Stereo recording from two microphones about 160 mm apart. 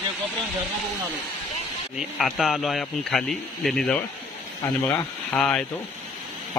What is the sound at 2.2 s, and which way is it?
A man's voice, centre (ahead or behind).